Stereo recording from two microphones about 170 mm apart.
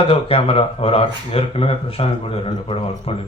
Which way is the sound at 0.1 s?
35° left (ahead or behind).